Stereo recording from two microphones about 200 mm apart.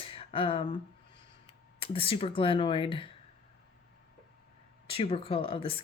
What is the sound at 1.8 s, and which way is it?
Speech, 25° left (ahead or behind).